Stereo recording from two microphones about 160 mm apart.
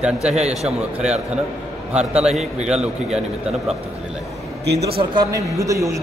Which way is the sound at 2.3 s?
45° right (ahead or behind).